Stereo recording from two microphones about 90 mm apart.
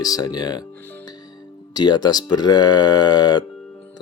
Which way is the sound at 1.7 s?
50° left (ahead or behind).